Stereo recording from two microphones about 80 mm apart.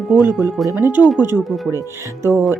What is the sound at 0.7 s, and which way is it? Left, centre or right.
Speech, right.